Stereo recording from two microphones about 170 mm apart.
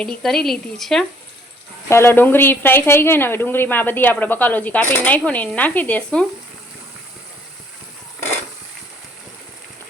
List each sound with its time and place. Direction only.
0.0 s speech: 5° left (ahead or behind)
1.9 s a woman's voice: 15° left (ahead or behind)